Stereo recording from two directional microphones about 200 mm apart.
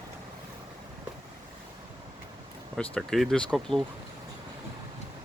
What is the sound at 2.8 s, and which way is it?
Speech, 5° left (ahead or behind).